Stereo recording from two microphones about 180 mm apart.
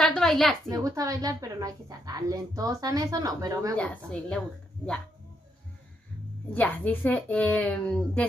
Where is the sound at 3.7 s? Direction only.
5° left (ahead or behind).